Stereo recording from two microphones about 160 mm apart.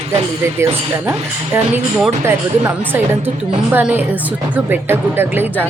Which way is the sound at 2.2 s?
15° right (ahead or behind).